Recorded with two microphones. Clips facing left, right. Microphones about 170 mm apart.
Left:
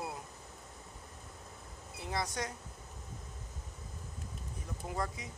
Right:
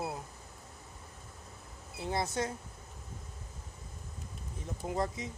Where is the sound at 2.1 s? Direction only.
25° right (ahead or behind).